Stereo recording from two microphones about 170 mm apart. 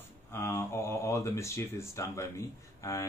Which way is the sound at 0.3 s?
15° left (ahead or behind).